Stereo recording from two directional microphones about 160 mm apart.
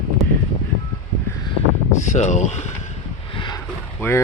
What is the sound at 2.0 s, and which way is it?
Speech, 45° left (ahead or behind).